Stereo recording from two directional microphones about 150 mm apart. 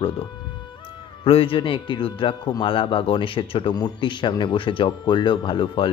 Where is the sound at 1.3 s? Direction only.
40° left (ahead or behind).